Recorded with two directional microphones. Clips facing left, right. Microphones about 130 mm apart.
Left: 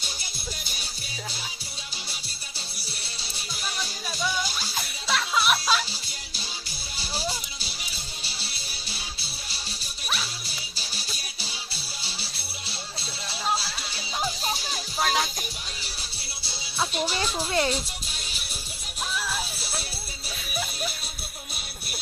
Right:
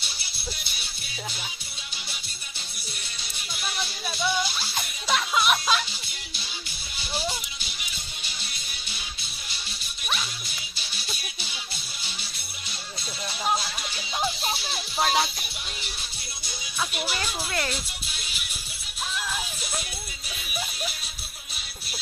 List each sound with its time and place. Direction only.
0.0 s music: 45° left (ahead or behind)
2.7 s music: 35° left (ahead or behind)
4.6 s music: 10° left (ahead or behind)
5.9 s music: 35° left (ahead or behind)
14.9 s music: centre (ahead or behind)
15.8 s music: 35° left (ahead or behind)
19.5 s music: 35° left (ahead or behind)